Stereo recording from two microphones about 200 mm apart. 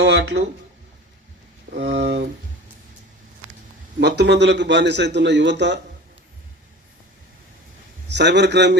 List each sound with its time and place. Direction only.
0.0 s a sound: 60° right (ahead or behind)
1.7 s a man's voice: 60° right (ahead or behind)
4.0 s a man's voice: 60° right (ahead or behind)
8.0 s a man's voice: 60° right (ahead or behind)